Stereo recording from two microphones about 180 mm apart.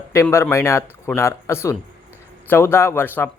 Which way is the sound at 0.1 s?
15° left (ahead or behind).